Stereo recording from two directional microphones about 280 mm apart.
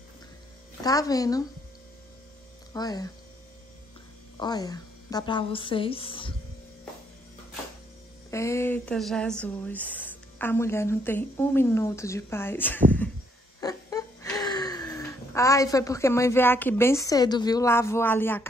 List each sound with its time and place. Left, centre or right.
0.8 s speech: centre
2.7 s speech: centre
4.4 s speech: centre
8.3 s speech: centre
13.6 s a sound: centre